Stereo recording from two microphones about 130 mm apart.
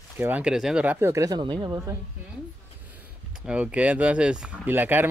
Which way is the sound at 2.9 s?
10° right (ahead or behind).